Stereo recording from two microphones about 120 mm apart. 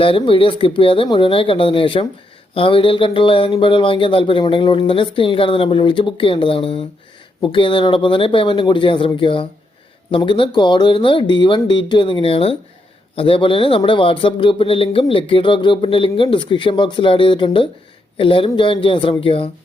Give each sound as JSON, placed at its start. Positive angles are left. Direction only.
{"t": 0.0, "sound": "speech", "side_deg": 50}